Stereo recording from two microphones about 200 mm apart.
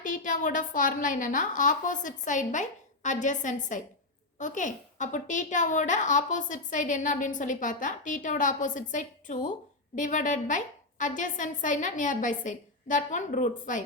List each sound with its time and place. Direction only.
0.0 s a woman's voice: 40° left (ahead or behind)